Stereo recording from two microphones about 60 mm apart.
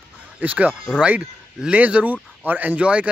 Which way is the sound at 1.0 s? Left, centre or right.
Centre.